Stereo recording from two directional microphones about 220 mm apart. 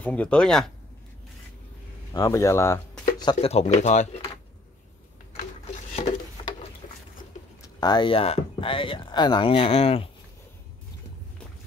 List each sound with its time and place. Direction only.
0.0 s speech: 5° left (ahead or behind)
2.1 s speech: 15° left (ahead or behind)
3.2 s speech: 25° left (ahead or behind)
6.4 s patter: 25° left (ahead or behind)
6.8 s patter: 35° left (ahead or behind)
7.6 s speech: 20° left (ahead or behind)